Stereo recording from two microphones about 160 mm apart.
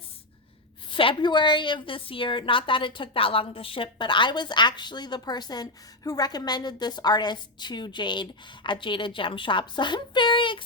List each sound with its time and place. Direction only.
0.9 s a woman's voice: 30° left (ahead or behind)